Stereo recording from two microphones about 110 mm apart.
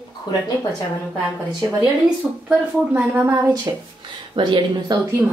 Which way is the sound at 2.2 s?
5° right (ahead or behind).